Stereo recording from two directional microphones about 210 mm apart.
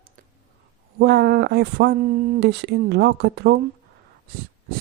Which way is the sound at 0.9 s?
50° right (ahead or behind).